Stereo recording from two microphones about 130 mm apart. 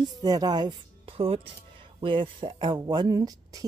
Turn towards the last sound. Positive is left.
turn(degrees=-30)  # may be behind; listen again after turning